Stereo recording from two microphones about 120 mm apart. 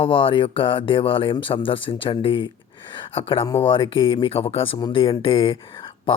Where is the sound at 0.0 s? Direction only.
45° left (ahead or behind).